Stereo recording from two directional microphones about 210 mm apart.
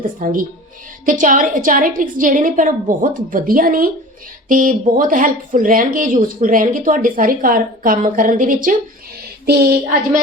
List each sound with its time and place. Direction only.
0.2 s a woman's voice: 40° right (ahead or behind)